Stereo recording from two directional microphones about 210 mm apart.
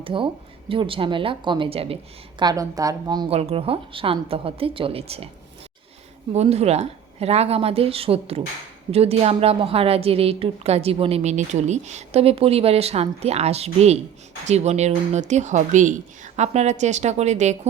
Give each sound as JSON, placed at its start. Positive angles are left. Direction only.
{"t": 0.0, "sound": "a woman's voice", "side_deg": -25}
{"t": 6.3, "sound": "a woman's voice", "side_deg": -30}